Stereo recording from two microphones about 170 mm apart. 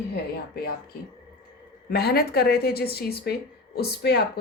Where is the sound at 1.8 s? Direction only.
70° left (ahead or behind).